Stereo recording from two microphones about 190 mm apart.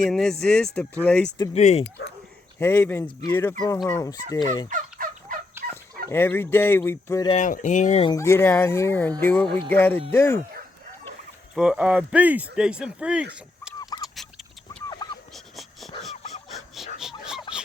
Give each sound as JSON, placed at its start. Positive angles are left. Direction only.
{"t": 0.0, "sound": "speech", "side_deg": 5}
{"t": 1.5, "sound": "speech", "side_deg": 35}
{"t": 2.6, "sound": "speech", "side_deg": 10}
{"t": 4.3, "sound": "fowl", "side_deg": 20}
{"t": 4.7, "sound": "turkey", "side_deg": -45}
{"t": 5.7, "sound": "speech", "side_deg": 10}
{"t": 7.3, "sound": "speech", "side_deg": 40}
{"t": 8.1, "sound": "speech", "side_deg": 15}
{"t": 11.5, "sound": "speech", "side_deg": -5}
{"t": 13.7, "sound": "fowl", "side_deg": 20}
{"t": 14.2, "sound": "rodents", "side_deg": 0}
{"t": 14.8, "sound": "fowl", "side_deg": 20}
{"t": 15.3, "sound": "dog", "side_deg": 0}
{"t": 16.0, "sound": "a sound", "side_deg": 0}